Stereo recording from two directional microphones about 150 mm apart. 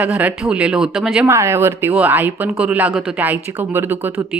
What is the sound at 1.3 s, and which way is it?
Speech, 15° right (ahead or behind).